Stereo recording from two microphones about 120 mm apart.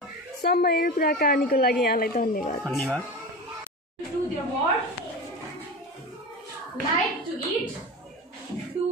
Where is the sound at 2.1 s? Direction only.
90° left.